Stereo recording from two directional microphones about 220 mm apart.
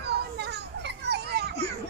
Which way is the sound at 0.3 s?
50° right (ahead or behind).